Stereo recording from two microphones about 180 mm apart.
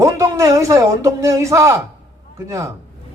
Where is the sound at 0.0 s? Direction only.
15° right (ahead or behind).